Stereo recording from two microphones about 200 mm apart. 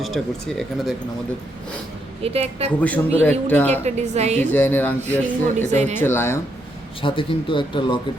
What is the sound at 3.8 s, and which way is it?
Speech, 35° right (ahead or behind).